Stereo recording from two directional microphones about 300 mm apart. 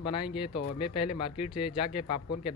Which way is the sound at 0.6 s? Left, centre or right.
Left.